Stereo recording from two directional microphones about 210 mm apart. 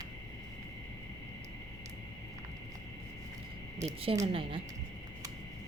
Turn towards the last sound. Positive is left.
turn(degrees=-25)  # may be behind; listen again after turning